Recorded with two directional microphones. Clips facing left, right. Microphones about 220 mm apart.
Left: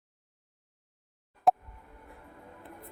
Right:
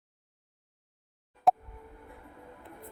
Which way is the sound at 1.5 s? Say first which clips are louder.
Even; centre (ahead or behind).